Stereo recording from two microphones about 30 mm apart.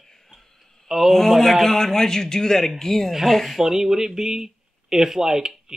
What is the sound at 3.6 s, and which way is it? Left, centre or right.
Speech, centre.